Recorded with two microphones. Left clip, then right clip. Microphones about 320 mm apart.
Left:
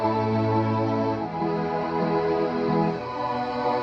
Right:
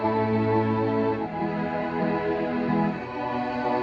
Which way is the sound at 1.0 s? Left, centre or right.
Centre.